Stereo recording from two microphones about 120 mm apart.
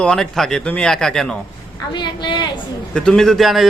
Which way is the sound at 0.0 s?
5° left (ahead or behind).